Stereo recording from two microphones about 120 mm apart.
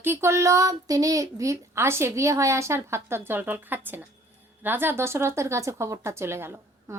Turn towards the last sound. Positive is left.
turn(degrees=-20)  # may be behind; listen again after turning